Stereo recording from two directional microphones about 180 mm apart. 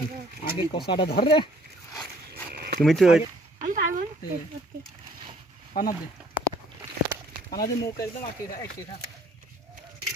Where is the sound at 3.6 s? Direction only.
50° right (ahead or behind).